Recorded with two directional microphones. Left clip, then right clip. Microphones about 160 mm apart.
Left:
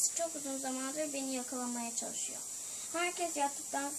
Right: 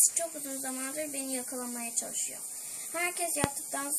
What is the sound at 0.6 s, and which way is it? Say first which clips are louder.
A woman's voice: right 1 dB; 10° right (ahead or behind).